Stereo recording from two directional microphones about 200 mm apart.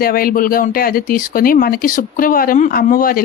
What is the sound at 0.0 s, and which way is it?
Speech, 45° left (ahead or behind).